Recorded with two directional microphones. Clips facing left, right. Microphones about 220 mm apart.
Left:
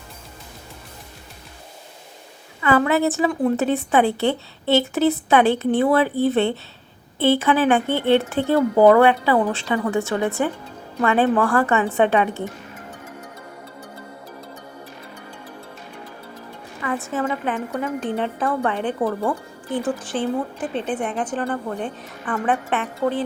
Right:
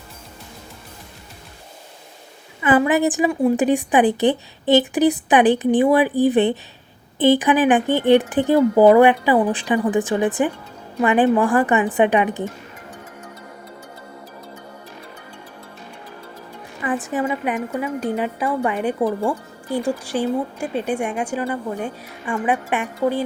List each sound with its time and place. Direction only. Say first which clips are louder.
2.6 s speech: right 2 dB; 15° right (ahead or behind)
16.8 s speech: right 2 dB; 15° right (ahead or behind)